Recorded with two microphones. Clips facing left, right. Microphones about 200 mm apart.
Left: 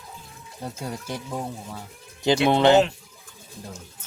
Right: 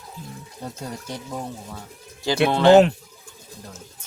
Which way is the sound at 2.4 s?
20° left (ahead or behind).